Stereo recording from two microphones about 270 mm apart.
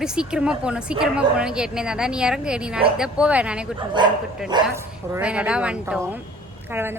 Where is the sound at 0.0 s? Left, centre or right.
Centre.